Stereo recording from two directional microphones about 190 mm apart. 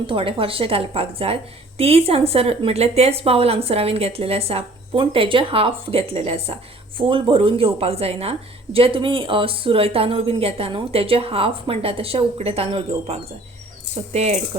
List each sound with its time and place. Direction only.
0.1 s a woman's voice: 30° right (ahead or behind)